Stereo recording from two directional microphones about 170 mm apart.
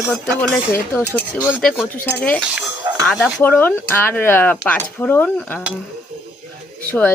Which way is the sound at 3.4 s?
10° left (ahead or behind).